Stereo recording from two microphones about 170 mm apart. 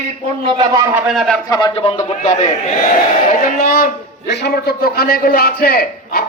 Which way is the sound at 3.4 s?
60° left (ahead or behind).